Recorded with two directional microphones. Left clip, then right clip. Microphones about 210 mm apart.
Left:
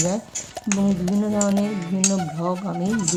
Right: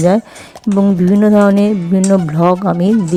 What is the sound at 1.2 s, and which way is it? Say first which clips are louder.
Speech: right 13 dB; 40° right (ahead or behind).